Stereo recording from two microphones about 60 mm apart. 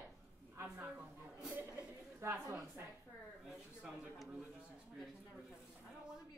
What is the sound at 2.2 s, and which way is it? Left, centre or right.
Speech, right.